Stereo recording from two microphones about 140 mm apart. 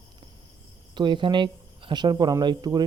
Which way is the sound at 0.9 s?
35° right (ahead or behind).